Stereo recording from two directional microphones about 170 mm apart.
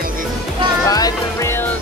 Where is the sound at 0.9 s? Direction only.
20° left (ahead or behind).